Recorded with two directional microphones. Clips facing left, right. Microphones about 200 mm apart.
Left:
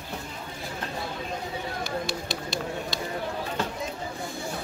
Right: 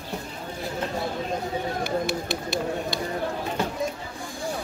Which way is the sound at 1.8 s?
55° right (ahead or behind).